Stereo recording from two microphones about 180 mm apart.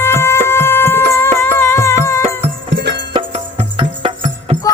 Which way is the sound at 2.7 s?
70° right (ahead or behind).